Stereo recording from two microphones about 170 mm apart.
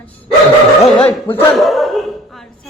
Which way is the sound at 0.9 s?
10° left (ahead or behind).